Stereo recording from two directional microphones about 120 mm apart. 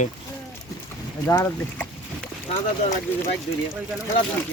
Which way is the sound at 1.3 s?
25° left (ahead or behind).